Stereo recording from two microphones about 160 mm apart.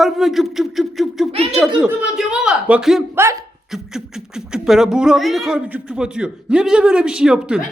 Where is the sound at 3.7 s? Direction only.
5° right (ahead or behind).